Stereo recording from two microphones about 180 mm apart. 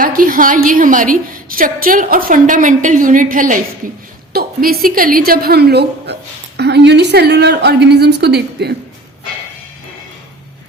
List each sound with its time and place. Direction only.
0.0 s a woman's voice: 50° right (ahead or behind); by 8.7 s 65° right (ahead or behind)